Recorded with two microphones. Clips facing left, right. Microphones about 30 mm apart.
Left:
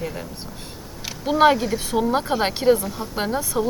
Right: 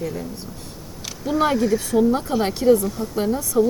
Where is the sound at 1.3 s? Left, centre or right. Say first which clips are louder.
Left 4 dB; left.